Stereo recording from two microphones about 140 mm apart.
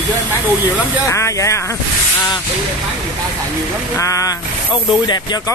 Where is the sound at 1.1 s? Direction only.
20° left (ahead or behind).